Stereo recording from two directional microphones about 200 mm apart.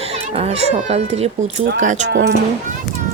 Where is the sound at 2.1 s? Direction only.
60° right (ahead or behind).